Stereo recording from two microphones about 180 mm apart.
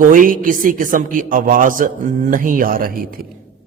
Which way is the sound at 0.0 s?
50° right (ahead or behind).